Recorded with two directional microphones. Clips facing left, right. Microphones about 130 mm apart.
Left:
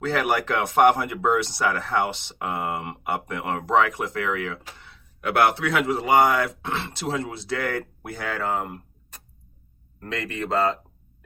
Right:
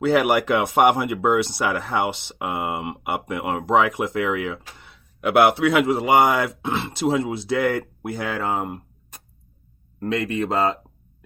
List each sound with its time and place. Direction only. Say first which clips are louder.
0.0 s speech: right 5 dB; 10° right (ahead or behind)